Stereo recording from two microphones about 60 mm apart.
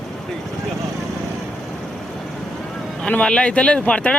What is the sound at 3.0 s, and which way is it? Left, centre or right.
Speech, centre.